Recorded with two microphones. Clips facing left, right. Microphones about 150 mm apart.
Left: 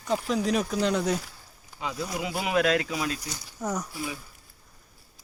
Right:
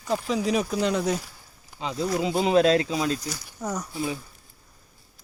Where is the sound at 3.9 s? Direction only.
25° right (ahead or behind).